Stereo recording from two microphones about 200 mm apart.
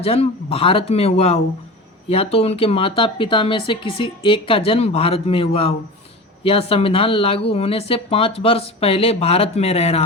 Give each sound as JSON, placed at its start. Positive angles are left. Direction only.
{"t": 0.0, "sound": "speech", "side_deg": 30}